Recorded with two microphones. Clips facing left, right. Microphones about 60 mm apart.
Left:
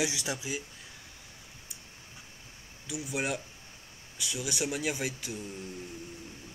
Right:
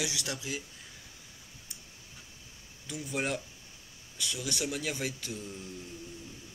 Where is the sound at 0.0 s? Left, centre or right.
Left.